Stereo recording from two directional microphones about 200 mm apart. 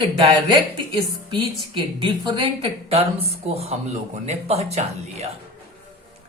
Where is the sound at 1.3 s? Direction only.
25° right (ahead or behind).